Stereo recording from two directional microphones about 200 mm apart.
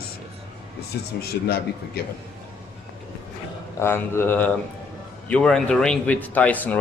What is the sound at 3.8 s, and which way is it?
Speech, 10° left (ahead or behind).